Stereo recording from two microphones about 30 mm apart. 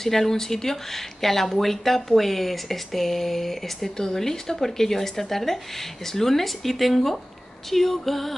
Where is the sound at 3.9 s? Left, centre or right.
Centre.